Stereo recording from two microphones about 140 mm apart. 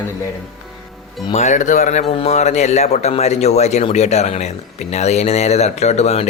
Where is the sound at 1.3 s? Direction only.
55° left (ahead or behind).